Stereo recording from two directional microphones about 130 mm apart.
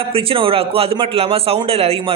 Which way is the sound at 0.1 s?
45° right (ahead or behind).